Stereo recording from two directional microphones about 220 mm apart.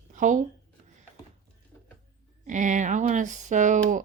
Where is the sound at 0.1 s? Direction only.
35° right (ahead or behind).